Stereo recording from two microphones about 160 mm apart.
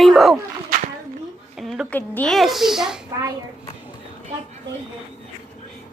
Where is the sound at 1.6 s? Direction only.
Centre (ahead or behind).